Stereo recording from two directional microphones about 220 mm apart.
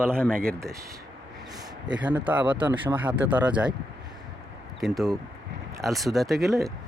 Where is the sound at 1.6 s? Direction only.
20° right (ahead or behind).